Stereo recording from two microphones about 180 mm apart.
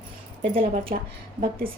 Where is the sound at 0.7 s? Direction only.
50° right (ahead or behind).